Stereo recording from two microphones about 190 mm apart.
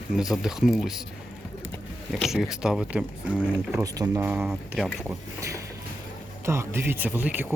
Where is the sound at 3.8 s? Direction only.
20° right (ahead or behind).